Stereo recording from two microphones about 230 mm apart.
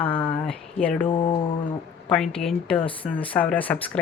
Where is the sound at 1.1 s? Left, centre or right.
Left.